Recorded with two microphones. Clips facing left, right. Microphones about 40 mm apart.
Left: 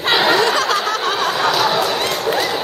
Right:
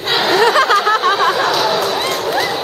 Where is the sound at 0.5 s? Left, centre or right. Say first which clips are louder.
Right 5 dB; centre.